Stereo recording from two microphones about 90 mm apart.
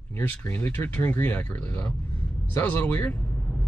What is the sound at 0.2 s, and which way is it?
Speech, 25° left (ahead or behind).